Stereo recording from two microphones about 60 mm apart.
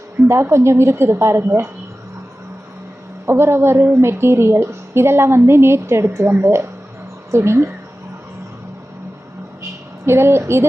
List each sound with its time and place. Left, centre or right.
0.3 s a woman's voice: right
3.2 s a woman's voice: right
10.1 s a woman's voice: right